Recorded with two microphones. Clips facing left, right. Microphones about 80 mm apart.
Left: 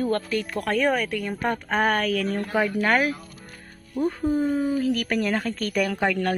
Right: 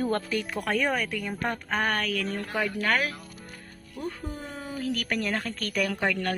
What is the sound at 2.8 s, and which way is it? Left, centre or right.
A woman's voice, left.